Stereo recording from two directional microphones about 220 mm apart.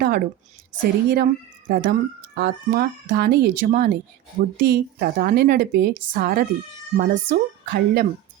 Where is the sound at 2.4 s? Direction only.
45° right (ahead or behind).